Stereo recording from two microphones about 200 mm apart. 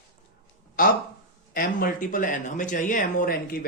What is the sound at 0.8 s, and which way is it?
Speech, 45° left (ahead or behind).